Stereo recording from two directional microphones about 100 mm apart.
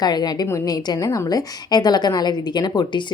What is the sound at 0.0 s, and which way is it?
A woman's voice, 45° left (ahead or behind).